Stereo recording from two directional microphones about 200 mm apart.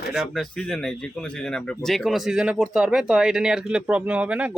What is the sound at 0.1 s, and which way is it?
Speech, centre (ahead or behind).